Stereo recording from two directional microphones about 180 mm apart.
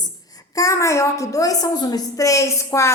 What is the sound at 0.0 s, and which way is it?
A woman's voice, 20° left (ahead or behind).